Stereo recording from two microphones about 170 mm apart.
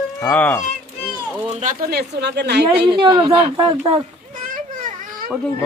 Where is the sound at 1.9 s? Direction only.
75° right (ahead or behind).